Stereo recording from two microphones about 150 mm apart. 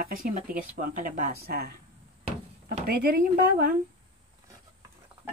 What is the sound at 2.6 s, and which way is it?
Speech, 80° right.